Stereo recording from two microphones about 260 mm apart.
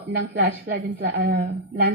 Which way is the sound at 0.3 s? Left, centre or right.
Right.